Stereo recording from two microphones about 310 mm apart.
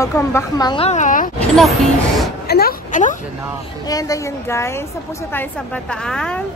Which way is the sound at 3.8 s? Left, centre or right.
Centre.